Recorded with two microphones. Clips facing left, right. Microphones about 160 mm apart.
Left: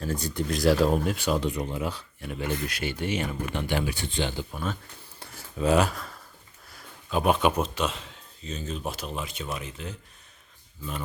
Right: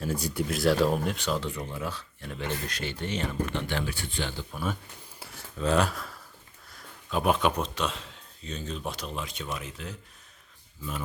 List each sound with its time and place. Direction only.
0.0 s speech: 10° right (ahead or behind); by 4.4 s 20° left (ahead or behind)
5.5 s speech: 10° left (ahead or behind)